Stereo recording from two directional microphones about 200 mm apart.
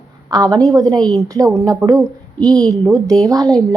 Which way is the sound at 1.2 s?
15° right (ahead or behind).